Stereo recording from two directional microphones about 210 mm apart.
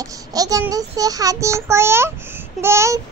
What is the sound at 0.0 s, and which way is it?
A child's voice, 15° right (ahead or behind).